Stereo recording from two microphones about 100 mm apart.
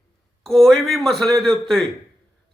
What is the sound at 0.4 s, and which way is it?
A man's voice, 5° left (ahead or behind).